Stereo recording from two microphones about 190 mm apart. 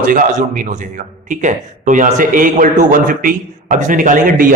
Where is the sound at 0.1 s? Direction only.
40° right (ahead or behind).